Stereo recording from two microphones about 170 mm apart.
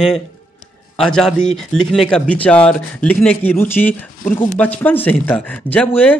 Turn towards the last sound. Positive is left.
turn(degrees=10)  # may be behind; listen again after turning